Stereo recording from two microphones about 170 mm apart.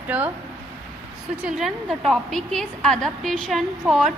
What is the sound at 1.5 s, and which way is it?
A woman's voice, centre (ahead or behind).